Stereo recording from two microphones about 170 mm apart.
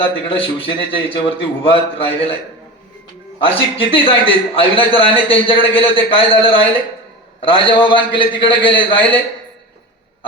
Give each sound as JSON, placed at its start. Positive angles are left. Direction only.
{"t": 0.3, "sound": "a man's voice", "side_deg": 30}
{"t": 3.3, "sound": "a man's voice", "side_deg": 30}